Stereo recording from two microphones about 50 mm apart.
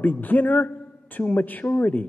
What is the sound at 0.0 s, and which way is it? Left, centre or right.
A man's voice, left.